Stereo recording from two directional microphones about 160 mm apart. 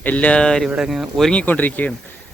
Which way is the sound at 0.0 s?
10° left (ahead or behind).